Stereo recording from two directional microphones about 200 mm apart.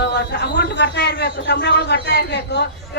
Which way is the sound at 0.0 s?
60° left (ahead or behind).